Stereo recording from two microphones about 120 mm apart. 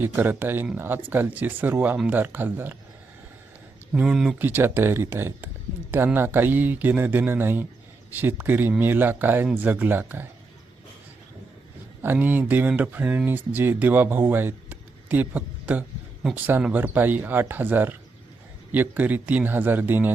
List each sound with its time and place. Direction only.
0.0 s speech: 15° right (ahead or behind)
3.9 s speech: 5° right (ahead or behind)
4.4 s speech: 15° right (ahead or behind)
12.0 s speech: 15° right (ahead or behind)